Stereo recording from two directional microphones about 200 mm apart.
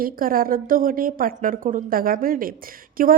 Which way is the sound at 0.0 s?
45° right (ahead or behind).